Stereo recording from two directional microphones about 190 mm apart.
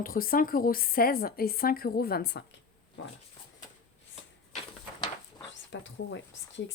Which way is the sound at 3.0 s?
75° left (ahead or behind).